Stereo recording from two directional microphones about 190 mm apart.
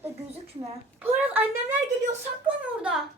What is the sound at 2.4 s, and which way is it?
Speech, 5° right (ahead or behind).